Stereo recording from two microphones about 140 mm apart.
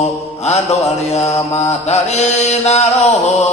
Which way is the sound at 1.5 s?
50° left (ahead or behind).